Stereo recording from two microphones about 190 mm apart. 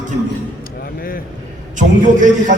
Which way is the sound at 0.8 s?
50° left (ahead or behind).